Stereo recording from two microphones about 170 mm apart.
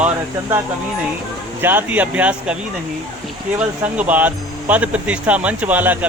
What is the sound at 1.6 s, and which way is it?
Speech, 10° right (ahead or behind).